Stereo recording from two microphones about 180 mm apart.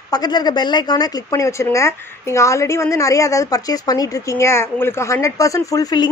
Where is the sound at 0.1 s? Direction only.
20° left (ahead or behind).